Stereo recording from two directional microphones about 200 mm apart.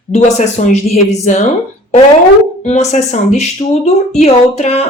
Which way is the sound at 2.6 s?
35° left (ahead or behind).